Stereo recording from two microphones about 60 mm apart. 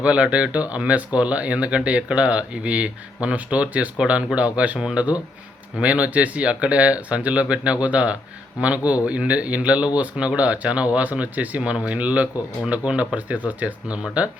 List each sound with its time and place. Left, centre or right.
0.0 s speech: centre
4.8 s speech: centre
5.8 s speech: right